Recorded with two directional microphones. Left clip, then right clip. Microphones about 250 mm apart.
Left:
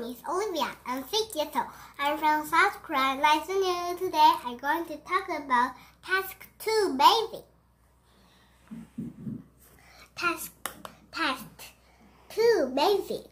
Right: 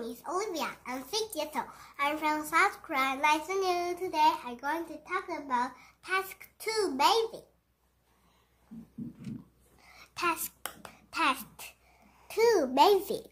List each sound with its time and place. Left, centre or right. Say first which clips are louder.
0.0 s a child's voice: left 3 dB; centre
9.9 s a sound: left 1 dB; right
11.1 s a child's voice: right 1 dB; right